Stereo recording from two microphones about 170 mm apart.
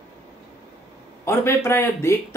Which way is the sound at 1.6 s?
15° left (ahead or behind).